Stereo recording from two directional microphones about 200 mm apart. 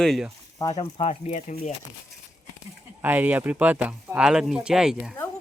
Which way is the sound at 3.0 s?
10° right (ahead or behind).